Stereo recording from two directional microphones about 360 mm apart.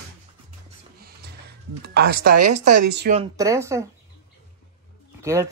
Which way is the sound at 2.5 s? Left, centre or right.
Right.